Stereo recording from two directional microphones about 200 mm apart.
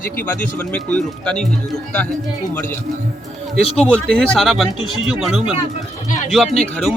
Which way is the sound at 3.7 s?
30° left (ahead or behind).